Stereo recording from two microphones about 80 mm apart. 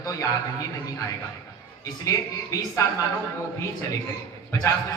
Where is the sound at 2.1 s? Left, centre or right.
Left.